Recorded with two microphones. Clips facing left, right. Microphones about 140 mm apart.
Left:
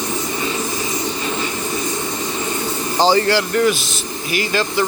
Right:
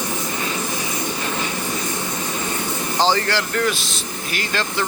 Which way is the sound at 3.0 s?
10° left (ahead or behind).